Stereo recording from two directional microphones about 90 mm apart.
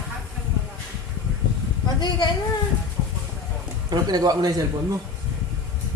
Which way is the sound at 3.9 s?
50° right (ahead or behind).